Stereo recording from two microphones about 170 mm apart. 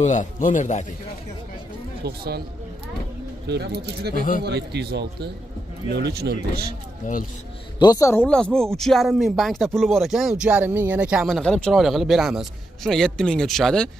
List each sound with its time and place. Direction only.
0.0 s speech: 45° left (ahead or behind)
2.0 s speech: 70° right (ahead or behind)
3.4 s speech: 75° right (ahead or behind)
4.1 s speech: 55° left (ahead or behind)
4.4 s a man's voice: 80° right
7.0 s speech: 50° left (ahead or behind)
7.8 s speech: 20° left (ahead or behind)
8.5 s speech: 5° left (ahead or behind)